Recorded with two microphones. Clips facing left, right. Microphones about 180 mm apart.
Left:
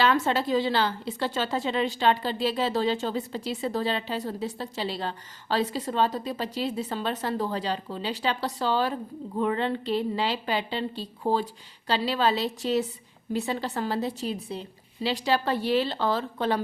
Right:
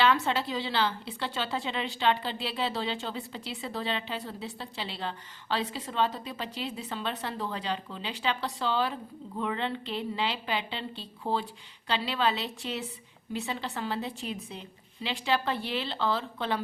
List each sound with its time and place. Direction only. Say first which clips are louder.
0.0 s a woman's voice: left 2 dB; 45° left (ahead or behind)